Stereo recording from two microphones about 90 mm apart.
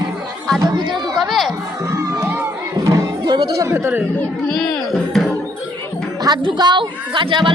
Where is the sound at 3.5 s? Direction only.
30° right (ahead or behind).